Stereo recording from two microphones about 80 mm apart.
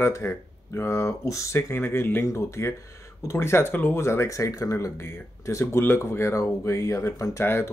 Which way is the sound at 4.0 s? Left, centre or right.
Left.